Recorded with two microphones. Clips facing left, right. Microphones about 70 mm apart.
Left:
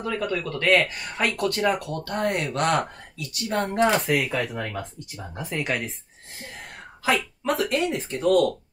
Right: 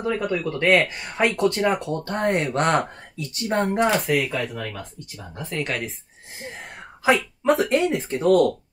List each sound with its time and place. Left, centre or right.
0.0 s speech: centre
3.8 s speech: centre
4.6 s speech: left
5.6 s speech: centre
7.1 s speech: right